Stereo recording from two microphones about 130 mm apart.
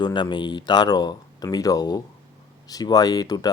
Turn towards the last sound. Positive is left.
turn(degrees=30)  # may be behind; listen again after turning